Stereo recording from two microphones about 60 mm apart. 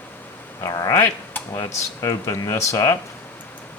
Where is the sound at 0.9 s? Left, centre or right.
Left.